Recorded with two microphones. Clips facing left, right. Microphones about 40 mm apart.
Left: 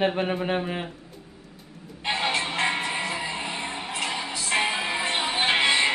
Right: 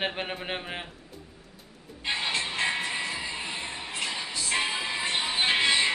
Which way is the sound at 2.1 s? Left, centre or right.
Centre.